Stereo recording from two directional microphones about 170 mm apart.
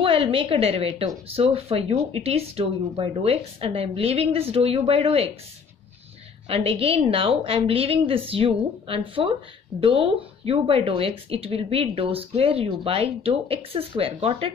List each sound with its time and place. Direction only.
0.0 s a woman's voice: 35° right (ahead or behind)
6.5 s speech: 35° right (ahead or behind)